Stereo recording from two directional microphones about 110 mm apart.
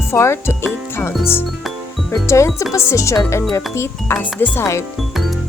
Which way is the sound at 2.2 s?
25° left (ahead or behind).